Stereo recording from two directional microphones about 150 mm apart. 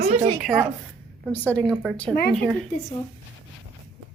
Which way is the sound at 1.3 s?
10° left (ahead or behind).